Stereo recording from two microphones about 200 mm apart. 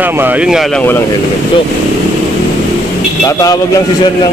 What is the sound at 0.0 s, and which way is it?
Speech, 10° right (ahead or behind).